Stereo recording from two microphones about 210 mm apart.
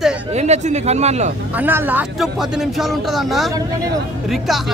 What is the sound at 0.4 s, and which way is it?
Speech, 30° right (ahead or behind).